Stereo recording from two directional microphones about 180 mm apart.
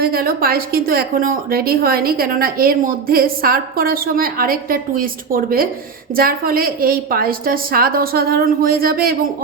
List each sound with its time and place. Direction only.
0.0 s a woman's voice: 55° right (ahead or behind)